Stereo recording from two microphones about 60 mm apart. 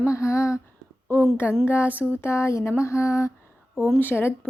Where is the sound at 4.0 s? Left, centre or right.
Left.